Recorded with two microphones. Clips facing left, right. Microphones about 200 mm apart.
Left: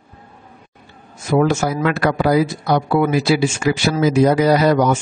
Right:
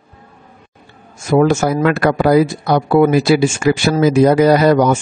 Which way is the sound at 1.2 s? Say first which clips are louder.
Right 4 dB; 50° right (ahead or behind).